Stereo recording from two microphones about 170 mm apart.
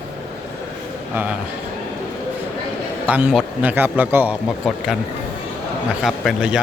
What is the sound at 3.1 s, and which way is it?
A man's voice, 10° right (ahead or behind).